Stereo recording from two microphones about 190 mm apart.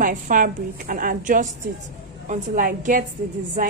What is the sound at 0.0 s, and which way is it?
A woman's voice, 45° right (ahead or behind).